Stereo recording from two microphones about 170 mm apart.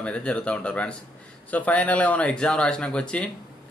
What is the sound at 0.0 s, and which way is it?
Speech, 5° left (ahead or behind).